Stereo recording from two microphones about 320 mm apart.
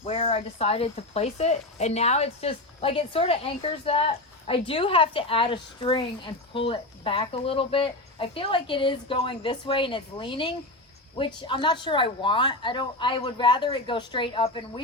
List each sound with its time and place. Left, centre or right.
0.0 s speech: centre